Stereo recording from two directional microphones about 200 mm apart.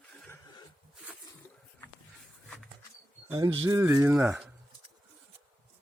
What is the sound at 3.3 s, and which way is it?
Speech, 20° right (ahead or behind).